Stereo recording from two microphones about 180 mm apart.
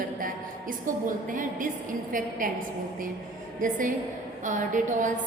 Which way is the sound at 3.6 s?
45° right (ahead or behind).